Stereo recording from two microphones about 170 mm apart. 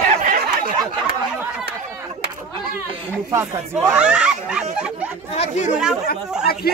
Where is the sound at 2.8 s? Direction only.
15° right (ahead or behind).